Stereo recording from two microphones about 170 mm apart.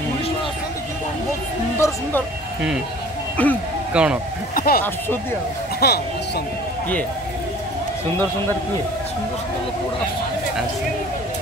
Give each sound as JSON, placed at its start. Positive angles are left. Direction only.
{"t": 1.8, "sound": "speech", "side_deg": 15}
{"t": 3.4, "sound": "speech", "side_deg": 10}
{"t": 3.9, "sound": "speech", "side_deg": -5}
{"t": 4.6, "sound": "speech", "side_deg": 60}
{"t": 5.8, "sound": "speech", "side_deg": 75}